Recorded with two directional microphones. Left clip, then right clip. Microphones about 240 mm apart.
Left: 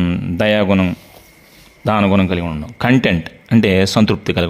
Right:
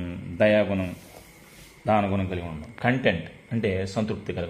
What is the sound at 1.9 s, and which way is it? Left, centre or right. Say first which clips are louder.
Speech: left 9 dB; left.